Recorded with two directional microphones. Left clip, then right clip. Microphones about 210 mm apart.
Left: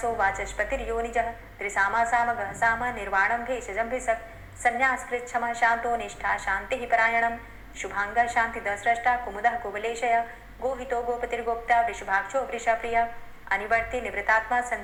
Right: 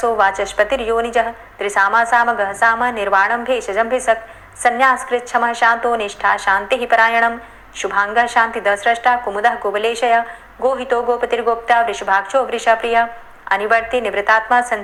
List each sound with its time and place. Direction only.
0.0 s a woman's voice: 30° right (ahead or behind)